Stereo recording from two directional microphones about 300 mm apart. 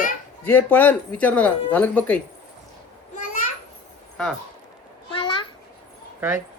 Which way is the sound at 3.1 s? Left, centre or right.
Left.